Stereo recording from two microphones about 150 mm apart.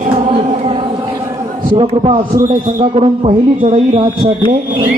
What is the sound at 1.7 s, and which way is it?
Speech, 35° right (ahead or behind).